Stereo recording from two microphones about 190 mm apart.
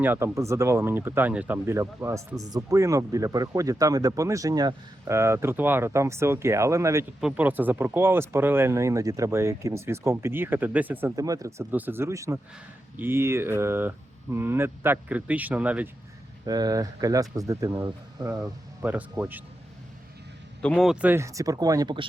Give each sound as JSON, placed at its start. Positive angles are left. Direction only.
{"t": 0.0, "sound": "speech", "side_deg": -10}
{"t": 16.5, "sound": "speech", "side_deg": -20}
{"t": 20.6, "sound": "speech", "side_deg": 5}